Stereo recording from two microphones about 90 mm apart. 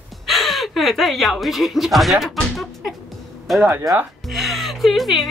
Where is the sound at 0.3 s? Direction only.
Centre (ahead or behind).